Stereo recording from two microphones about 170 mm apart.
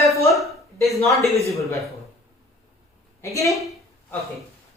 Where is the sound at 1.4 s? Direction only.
15° left (ahead or behind).